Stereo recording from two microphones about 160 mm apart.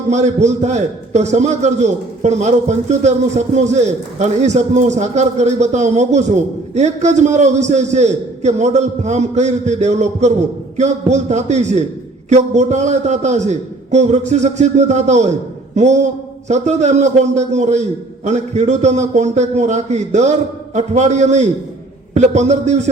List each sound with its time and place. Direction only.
0.1 s a man's voice: 45° right (ahead or behind)